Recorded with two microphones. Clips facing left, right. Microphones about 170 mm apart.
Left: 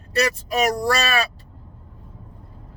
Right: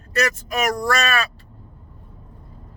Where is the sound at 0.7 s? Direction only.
35° left (ahead or behind).